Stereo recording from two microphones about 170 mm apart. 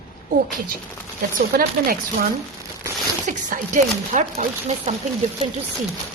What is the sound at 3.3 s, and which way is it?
A woman's voice, 50° right (ahead or behind).